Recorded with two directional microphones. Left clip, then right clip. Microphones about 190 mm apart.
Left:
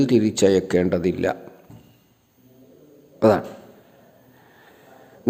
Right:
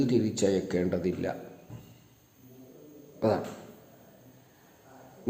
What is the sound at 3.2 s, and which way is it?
Speech, 40° left (ahead or behind).